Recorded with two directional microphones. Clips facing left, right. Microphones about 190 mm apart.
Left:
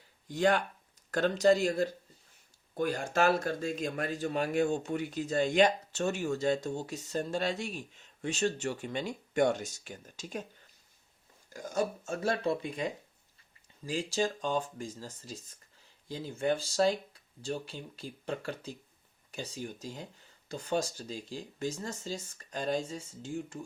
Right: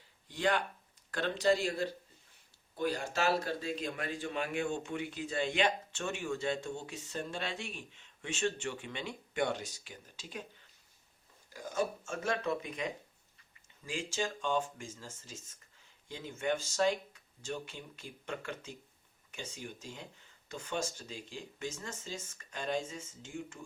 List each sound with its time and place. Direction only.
0.3 s a man's voice: 45° left (ahead or behind)
11.5 s a man's voice: 45° left (ahead or behind)